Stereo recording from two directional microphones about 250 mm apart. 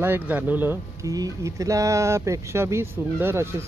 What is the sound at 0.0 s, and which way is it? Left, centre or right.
Speech, centre.